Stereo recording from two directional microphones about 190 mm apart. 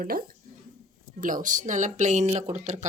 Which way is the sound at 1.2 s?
45° right (ahead or behind).